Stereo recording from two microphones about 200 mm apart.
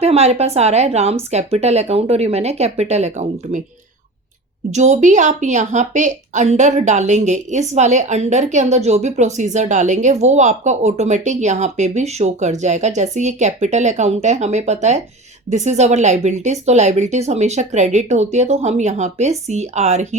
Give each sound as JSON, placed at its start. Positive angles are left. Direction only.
{"t": 0.0, "sound": "a woman's voice", "side_deg": -30}
{"t": 4.7, "sound": "a woman's voice", "side_deg": -35}